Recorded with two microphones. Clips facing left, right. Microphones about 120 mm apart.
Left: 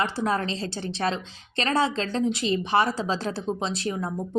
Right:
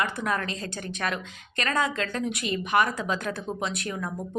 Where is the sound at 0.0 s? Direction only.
30° left (ahead or behind).